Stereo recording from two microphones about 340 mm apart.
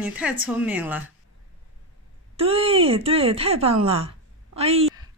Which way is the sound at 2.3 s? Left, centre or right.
Centre.